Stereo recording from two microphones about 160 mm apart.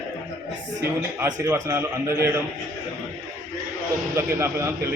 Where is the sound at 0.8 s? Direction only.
15° right (ahead or behind).